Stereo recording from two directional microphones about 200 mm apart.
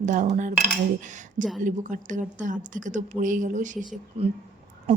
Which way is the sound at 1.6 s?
40° right (ahead or behind).